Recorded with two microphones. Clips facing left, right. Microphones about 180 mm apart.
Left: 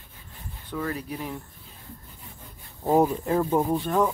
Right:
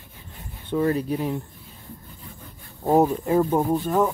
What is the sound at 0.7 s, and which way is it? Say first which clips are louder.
Speech: right 9 dB; 30° right (ahead or behind).